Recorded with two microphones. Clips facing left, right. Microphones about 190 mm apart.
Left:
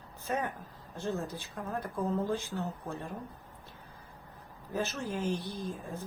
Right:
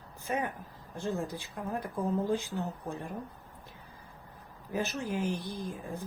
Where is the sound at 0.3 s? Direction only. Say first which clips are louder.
Right 1 dB; 15° right (ahead or behind).